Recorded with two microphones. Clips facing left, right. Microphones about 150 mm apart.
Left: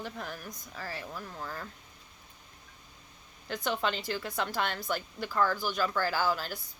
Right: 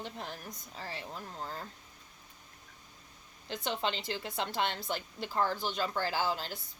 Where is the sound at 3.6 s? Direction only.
55° left (ahead or behind).